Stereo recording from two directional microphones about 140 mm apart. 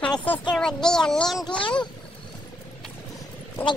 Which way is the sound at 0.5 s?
5° left (ahead or behind).